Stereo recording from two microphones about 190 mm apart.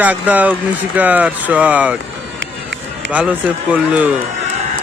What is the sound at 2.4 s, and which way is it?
Run, 75° right (ahead or behind).